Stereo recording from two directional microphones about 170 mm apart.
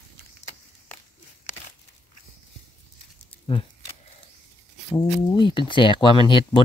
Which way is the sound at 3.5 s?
30° left (ahead or behind).